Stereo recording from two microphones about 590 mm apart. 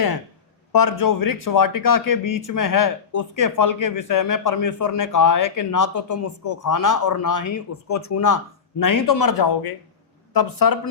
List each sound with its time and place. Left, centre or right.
0.7 s speech: left